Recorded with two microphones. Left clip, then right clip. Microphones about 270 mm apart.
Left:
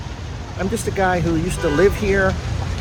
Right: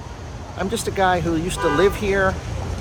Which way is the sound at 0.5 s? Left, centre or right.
Centre.